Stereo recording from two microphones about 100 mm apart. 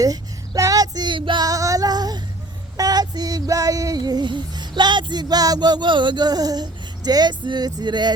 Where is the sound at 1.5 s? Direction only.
35° right (ahead or behind).